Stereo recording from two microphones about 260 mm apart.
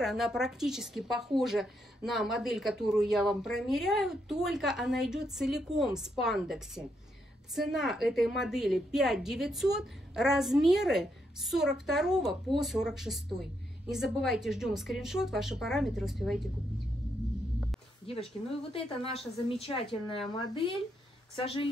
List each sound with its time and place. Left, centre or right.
0.0 s a woman's voice: centre
18.1 s speech: left